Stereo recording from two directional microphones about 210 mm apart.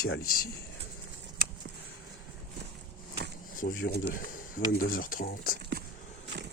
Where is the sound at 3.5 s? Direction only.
45° left (ahead or behind).